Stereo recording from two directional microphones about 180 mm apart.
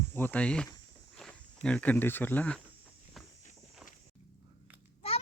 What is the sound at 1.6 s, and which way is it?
Speech, 5° left (ahead or behind).